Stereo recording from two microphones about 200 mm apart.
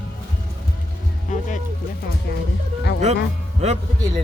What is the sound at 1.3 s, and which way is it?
Speech, 40° left (ahead or behind).